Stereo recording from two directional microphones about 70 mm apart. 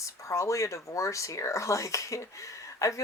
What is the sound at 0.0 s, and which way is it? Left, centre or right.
Speech, left.